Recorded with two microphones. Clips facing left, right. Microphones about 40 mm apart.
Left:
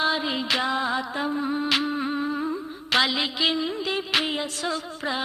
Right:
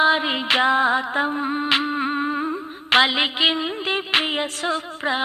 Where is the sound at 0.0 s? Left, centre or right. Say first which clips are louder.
Right 6 dB; right.